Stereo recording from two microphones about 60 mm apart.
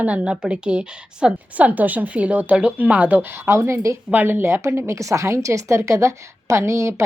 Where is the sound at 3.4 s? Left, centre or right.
Right.